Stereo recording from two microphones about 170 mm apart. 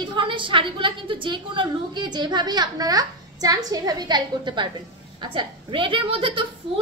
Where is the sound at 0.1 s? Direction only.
30° right (ahead or behind).